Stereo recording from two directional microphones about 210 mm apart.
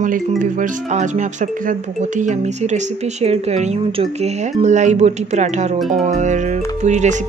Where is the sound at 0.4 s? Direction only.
35° right (ahead or behind).